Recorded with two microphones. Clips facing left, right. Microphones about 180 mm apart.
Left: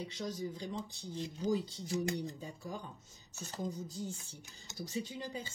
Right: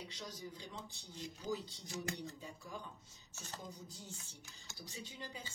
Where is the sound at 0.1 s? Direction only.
45° left (ahead or behind).